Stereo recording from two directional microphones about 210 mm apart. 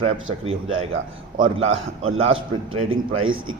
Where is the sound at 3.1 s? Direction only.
70° right (ahead or behind).